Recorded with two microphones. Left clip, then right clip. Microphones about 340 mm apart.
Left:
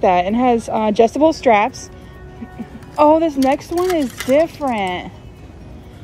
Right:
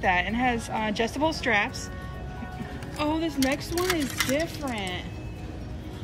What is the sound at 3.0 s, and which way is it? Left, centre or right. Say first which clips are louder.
Speech: left 15 dB; centre.